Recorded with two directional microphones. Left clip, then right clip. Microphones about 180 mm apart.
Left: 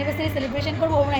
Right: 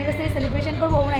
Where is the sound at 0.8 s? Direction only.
15° left (ahead or behind).